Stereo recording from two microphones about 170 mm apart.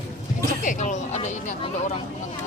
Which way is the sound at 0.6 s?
45° left (ahead or behind).